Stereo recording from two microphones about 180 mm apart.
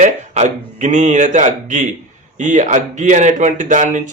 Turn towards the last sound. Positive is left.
turn(degrees=-45)  # may be behind; listen again after turning